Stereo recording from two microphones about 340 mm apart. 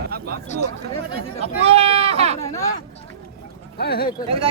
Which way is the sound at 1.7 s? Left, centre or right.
Centre.